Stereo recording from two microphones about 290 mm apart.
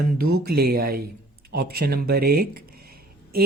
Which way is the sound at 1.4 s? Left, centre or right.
Right.